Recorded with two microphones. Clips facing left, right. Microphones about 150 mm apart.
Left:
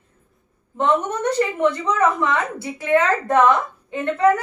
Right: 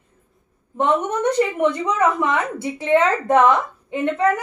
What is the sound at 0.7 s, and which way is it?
Speech, 20° right (ahead or behind).